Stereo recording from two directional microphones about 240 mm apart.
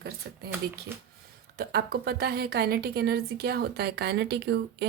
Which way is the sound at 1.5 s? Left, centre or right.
Right.